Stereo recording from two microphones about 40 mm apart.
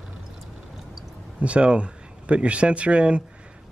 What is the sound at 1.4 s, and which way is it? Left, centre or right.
Speech, right.